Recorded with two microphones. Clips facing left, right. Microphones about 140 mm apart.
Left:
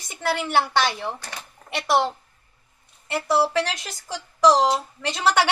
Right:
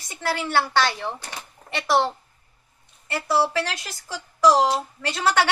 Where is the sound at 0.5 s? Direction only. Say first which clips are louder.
Right 1 dB; 15° left (ahead or behind).